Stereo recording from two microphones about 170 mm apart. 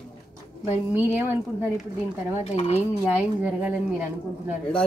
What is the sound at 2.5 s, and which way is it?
Speech, 35° left (ahead or behind).